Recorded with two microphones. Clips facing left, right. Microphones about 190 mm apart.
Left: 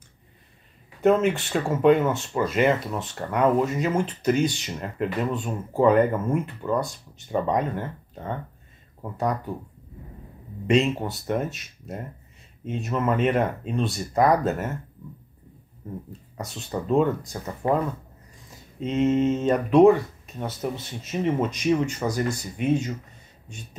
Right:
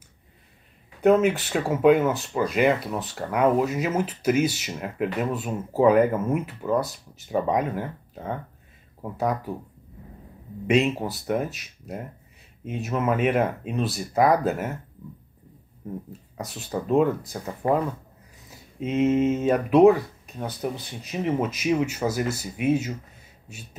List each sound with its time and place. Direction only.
1.0 s speech: centre (ahead or behind)
10.7 s speech: centre (ahead or behind)
16.1 s speech: centre (ahead or behind)